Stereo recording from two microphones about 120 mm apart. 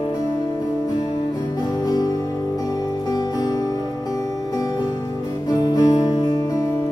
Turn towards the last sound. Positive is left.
turn(degrees=35)  # may be behind; listen again after turning